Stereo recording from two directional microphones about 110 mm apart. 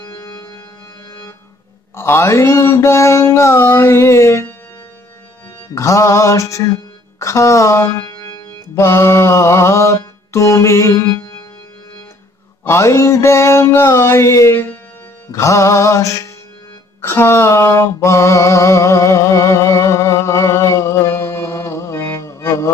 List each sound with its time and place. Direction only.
2.0 s mantra: 25° left (ahead or behind)
5.8 s music: 30° left (ahead or behind)
8.7 s mantra: 25° left (ahead or behind)
12.6 s mantra: 25° left (ahead or behind)
17.0 s a sound: 25° left (ahead or behind)